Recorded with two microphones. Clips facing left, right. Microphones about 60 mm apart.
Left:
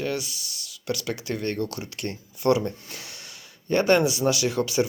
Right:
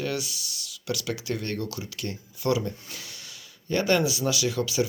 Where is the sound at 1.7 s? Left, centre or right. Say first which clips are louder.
Left 2 dB; left.